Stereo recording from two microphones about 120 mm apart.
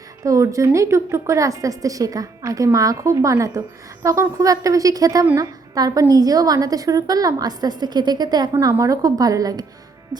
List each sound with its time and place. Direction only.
0.2 s a woman's voice: 25° right (ahead or behind)